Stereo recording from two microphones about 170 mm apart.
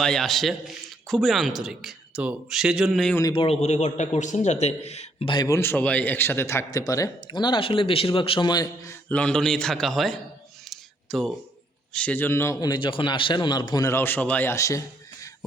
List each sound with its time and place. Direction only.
0.0 s speech: 5° left (ahead or behind)
3.3 s a man's voice: 35° left (ahead or behind)
5.3 s a man's voice: 20° left (ahead or behind); by 10.2 s centre (ahead or behind)
10.7 s a sound: centre (ahead or behind)
11.9 s a man's voice: 10° left (ahead or behind)